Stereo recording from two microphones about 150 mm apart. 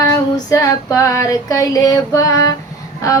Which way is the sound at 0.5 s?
20° left (ahead or behind).